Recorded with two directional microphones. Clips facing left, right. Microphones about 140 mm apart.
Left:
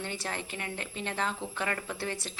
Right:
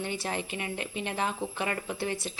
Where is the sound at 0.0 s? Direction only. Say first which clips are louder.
Right 4 dB; 15° right (ahead or behind).